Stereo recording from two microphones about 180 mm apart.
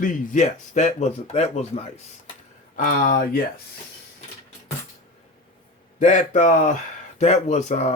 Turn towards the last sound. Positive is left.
turn(degrees=40)  # may be behind; listen again after turning